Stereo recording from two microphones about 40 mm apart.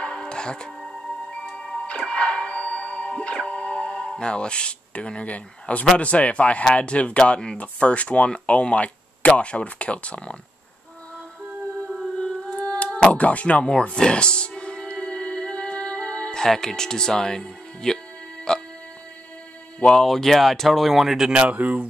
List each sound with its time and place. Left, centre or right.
0.0 s music: centre
4.1 s speech: left
12.5 s a sound: left
13.1 s speech: left
13.9 s music: left
16.3 s speech: centre
18.5 s music: centre
19.9 s speech: centre
21.5 s speech: right